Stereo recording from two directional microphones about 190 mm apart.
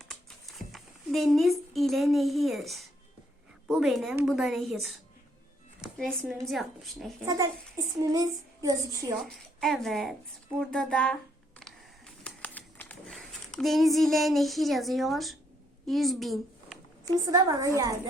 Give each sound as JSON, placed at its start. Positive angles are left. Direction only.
{"t": 0.0, "sound": "a sound", "side_deg": 0}
{"t": 3.7, "sound": "a woman's voice", "side_deg": 0}
{"t": 7.8, "sound": "speech", "side_deg": -15}
{"t": 9.1, "sound": "a woman's voice", "side_deg": 0}
{"t": 11.6, "sound": "a sound", "side_deg": 5}
{"t": 15.9, "sound": "a woman's voice", "side_deg": 0}
{"t": 17.3, "sound": "a woman's voice", "side_deg": -20}